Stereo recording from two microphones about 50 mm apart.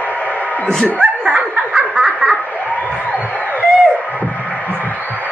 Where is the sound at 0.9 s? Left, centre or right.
Centre.